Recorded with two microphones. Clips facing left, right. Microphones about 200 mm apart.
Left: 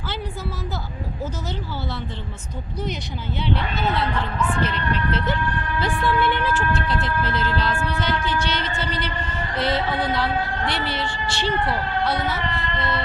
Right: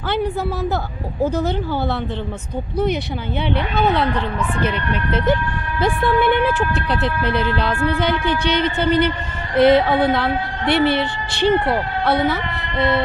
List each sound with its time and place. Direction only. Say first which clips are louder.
0.1 s speech: right 11 dB; 60° right (ahead or behind)
3.5 s speech: right 6 dB; 60° right (ahead or behind)
5.1 s speech: right 5 dB; 50° right (ahead or behind)